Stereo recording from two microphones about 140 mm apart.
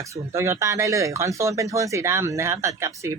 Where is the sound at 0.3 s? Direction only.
20° right (ahead or behind).